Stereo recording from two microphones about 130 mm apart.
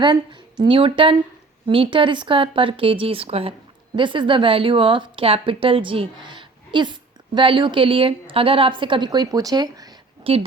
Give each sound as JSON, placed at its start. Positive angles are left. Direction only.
{"t": 0.0, "sound": "a woman's voice", "side_deg": -35}
{"t": 10.3, "sound": "speech", "side_deg": -45}